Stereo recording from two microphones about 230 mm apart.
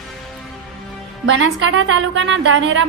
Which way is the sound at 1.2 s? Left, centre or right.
Right.